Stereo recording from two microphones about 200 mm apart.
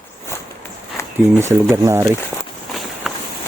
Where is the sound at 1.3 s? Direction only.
10° right (ahead or behind).